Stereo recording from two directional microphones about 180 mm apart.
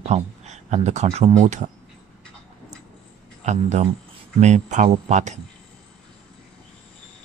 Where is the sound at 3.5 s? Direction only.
40° right (ahead or behind).